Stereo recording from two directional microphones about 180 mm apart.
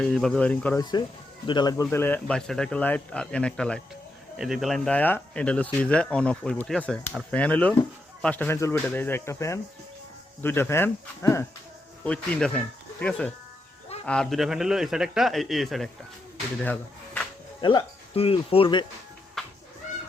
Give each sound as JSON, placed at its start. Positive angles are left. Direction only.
{"t": 0.0, "sound": "a man's voice", "side_deg": 5}
{"t": 0.8, "sound": "a man's voice", "side_deg": 25}
{"t": 16.6, "sound": "a sound", "side_deg": 10}
{"t": 17.6, "sound": "speech", "side_deg": 25}
{"t": 19.4, "sound": "music", "side_deg": 0}